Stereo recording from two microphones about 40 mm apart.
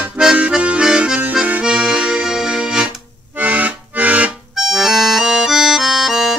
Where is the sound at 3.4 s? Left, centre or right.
Right.